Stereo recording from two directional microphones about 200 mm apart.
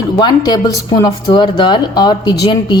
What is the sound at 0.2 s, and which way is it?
Speech, 20° left (ahead or behind).